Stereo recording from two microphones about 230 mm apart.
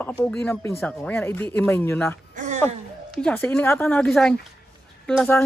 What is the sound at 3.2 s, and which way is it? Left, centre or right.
Speech, centre.